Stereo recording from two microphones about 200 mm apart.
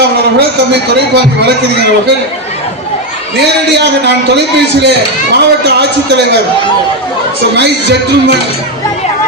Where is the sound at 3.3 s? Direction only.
60° right (ahead or behind).